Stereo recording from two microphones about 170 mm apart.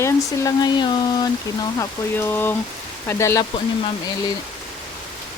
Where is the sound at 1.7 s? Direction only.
15° left (ahead or behind).